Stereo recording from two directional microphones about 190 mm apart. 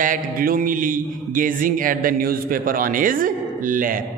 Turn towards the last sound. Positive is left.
turn(degrees=-45)  # may be behind; listen again after turning